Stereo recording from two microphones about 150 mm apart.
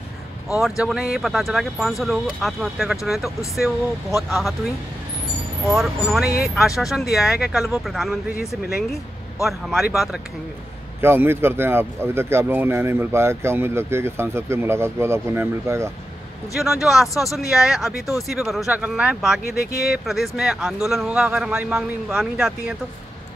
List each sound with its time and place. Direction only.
0.6 s speech: centre (ahead or behind)
6.2 s speech: 90° left
6.8 s speech: centre (ahead or behind)
11.0 s speech: 15° right (ahead or behind)
16.5 s speech: centre (ahead or behind)
19.4 s speech: 90° left
20.1 s speech: 5° right (ahead or behind)